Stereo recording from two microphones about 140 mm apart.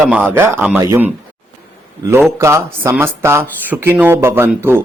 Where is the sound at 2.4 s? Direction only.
20° right (ahead or behind).